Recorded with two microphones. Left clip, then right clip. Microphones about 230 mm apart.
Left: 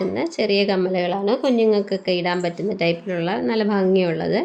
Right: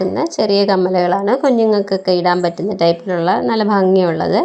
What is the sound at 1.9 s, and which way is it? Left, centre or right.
A woman's voice, centre.